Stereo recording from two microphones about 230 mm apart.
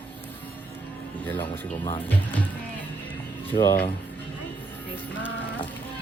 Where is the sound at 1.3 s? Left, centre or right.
Centre.